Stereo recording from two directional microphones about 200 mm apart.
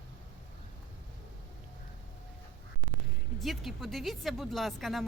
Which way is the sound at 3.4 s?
Centre (ahead or behind).